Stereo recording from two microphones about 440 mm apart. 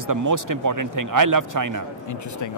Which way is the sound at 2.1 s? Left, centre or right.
Left.